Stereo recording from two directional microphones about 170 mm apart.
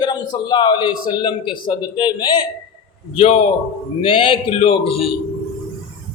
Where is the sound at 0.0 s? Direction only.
25° left (ahead or behind).